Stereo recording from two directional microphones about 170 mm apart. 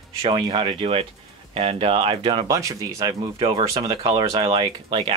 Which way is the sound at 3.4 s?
35° right (ahead or behind).